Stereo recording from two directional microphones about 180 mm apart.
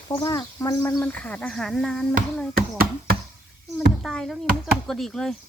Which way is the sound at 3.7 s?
Centre (ahead or behind).